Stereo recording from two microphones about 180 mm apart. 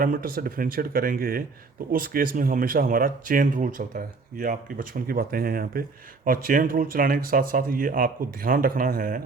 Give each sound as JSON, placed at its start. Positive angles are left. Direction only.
{"t": 0.0, "sound": "speech", "side_deg": -55}